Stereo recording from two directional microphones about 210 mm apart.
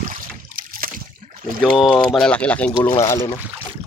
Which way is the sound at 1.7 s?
Centre (ahead or behind).